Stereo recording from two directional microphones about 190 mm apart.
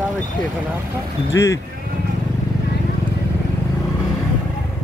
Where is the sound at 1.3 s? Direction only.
15° left (ahead or behind).